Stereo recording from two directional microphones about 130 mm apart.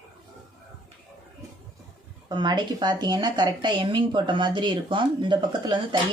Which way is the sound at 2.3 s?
35° right (ahead or behind).